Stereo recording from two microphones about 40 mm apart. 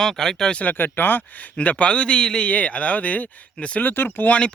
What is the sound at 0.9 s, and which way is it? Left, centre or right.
Speech, left.